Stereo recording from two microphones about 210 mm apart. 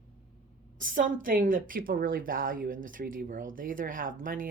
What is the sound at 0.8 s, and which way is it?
A woman's voice, 40° right (ahead or behind).